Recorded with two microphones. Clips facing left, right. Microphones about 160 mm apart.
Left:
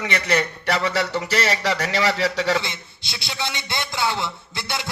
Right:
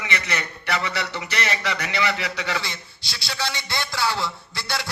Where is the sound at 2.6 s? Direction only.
20° left (ahead or behind).